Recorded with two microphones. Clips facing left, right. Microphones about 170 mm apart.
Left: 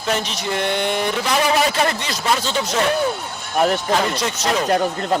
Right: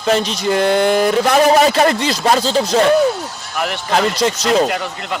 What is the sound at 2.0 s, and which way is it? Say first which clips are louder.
Speech: right 7 dB; 90° right.